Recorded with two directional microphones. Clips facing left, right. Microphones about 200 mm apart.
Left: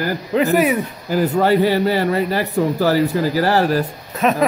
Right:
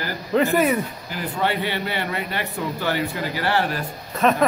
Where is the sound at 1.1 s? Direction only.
40° left (ahead or behind).